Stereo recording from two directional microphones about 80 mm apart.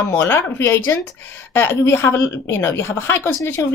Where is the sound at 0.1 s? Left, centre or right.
Left.